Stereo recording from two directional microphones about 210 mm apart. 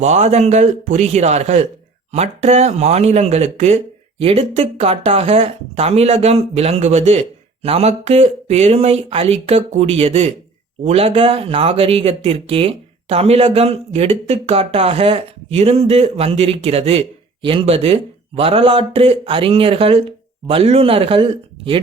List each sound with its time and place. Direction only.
0.0 s a man's voice: 30° right (ahead or behind)